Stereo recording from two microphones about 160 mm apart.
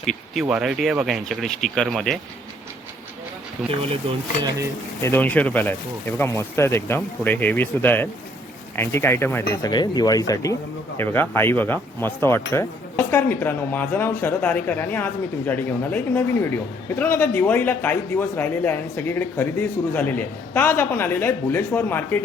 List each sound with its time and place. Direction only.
0.0 s speech: centre (ahead or behind)
3.6 s speech: centre (ahead or behind)
5.0 s a man's voice: 10° left (ahead or behind)